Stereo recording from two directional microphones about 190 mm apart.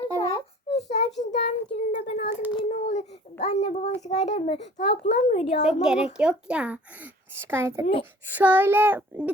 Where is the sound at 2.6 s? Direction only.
35° left (ahead or behind).